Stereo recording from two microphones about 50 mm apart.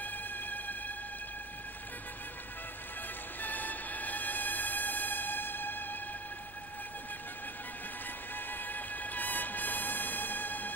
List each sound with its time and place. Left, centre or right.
0.0 s music: left
3.3 s music: left
8.4 s music: left